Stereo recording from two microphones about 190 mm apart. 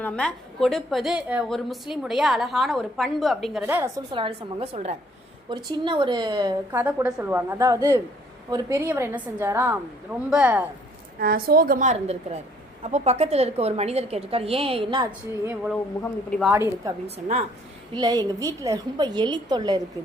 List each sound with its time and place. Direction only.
0.0 s a woman's voice: 5° left (ahead or behind)
3.7 s a woman's voice: 10° right (ahead or behind)
4.1 s a woman's voice: 30° right (ahead or behind)
5.5 s a woman's voice: 25° right (ahead or behind)
6.7 s a woman's voice: 10° right (ahead or behind)
11.2 s a woman's voice: 50° right (ahead or behind); by 15.0 s 25° right (ahead or behind)
16.0 s a woman's voice: 5° left (ahead or behind)
16.5 s a woman's voice: 15° right (ahead or behind)
17.9 s a woman's voice: 20° right (ahead or behind)